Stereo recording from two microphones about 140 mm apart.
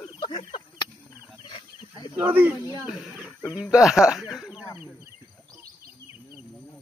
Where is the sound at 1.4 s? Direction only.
35° left (ahead or behind).